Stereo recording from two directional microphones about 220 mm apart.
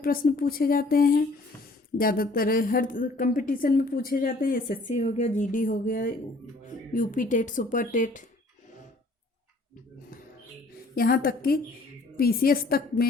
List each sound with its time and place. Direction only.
0.0 s speech: 40° left (ahead or behind)
10.9 s a woman's voice: 40° left (ahead or behind)